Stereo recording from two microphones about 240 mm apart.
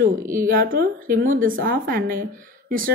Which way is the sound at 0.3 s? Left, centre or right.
Right.